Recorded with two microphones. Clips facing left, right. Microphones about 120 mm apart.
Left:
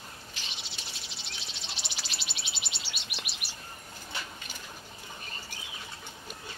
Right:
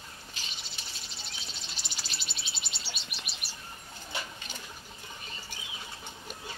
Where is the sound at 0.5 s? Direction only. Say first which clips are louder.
Left 2 dB; centre (ahead or behind).